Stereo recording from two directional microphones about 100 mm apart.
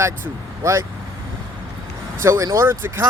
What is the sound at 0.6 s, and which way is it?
Speech, 30° right (ahead or behind).